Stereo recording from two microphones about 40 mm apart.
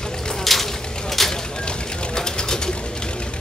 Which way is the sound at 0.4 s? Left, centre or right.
Centre.